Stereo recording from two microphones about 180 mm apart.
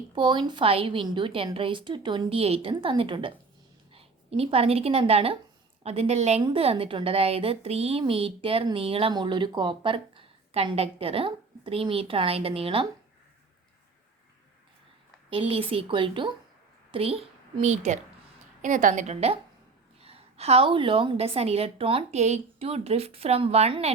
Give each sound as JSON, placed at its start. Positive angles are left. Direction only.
{"t": 0.1, "sound": "a woman's voice", "side_deg": -25}
{"t": 15.3, "sound": "a woman's voice", "side_deg": -30}